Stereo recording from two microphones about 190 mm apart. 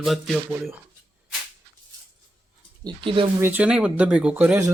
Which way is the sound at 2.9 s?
25° right (ahead or behind).